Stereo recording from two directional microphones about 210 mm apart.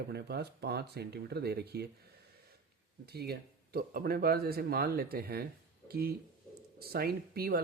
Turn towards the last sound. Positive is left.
turn(degrees=-45)  # may be behind; listen again after turning